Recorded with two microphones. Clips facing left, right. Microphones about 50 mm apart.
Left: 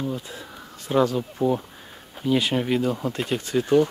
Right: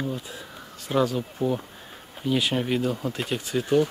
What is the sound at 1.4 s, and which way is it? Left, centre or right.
Speech, right.